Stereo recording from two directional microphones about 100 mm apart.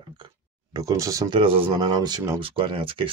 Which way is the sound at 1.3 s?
65° right (ahead or behind).